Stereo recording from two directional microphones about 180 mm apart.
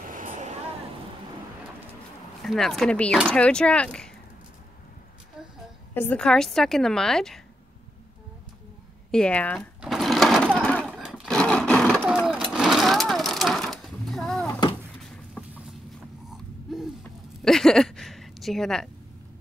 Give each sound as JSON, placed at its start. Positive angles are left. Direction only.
{"t": 0.1, "sound": "a sound", "side_deg": -45}
{"t": 2.4, "sound": "a woman's voice", "side_deg": 0}
{"t": 5.9, "sound": "a woman's voice", "side_deg": 5}
{"t": 9.1, "sound": "a woman's voice", "side_deg": 5}
{"t": 9.8, "sound": "sewing machine", "side_deg": 0}
{"t": 16.3, "sound": "creak", "side_deg": 0}
{"t": 17.4, "sound": "a sound", "side_deg": 0}